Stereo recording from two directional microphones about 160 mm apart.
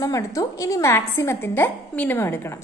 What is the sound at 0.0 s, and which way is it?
A woman's voice, 20° left (ahead or behind).